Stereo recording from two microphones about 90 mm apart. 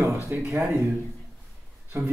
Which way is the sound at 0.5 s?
35° right (ahead or behind).